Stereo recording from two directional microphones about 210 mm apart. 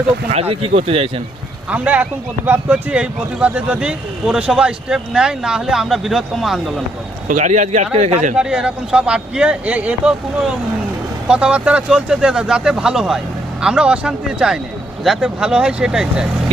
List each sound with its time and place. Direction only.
0.3 s speech: 30° right (ahead or behind)
1.7 s speech: 5° right (ahead or behind)
7.3 s speech: 35° right (ahead or behind)
8.4 s speech: 5° right (ahead or behind)